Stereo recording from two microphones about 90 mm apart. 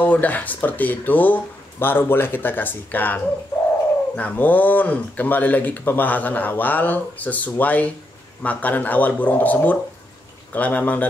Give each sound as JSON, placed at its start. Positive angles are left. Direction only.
{"t": 0.0, "sound": "speech", "side_deg": 15}